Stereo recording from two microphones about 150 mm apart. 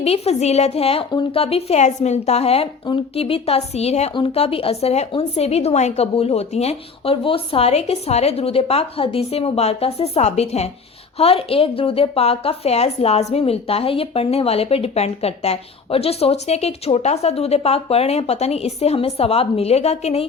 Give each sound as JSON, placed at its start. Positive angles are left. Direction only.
{"t": 0.0, "sound": "a woman's voice", "side_deg": 45}